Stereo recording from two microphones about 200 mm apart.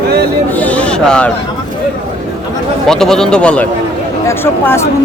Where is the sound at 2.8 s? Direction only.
Centre (ahead or behind).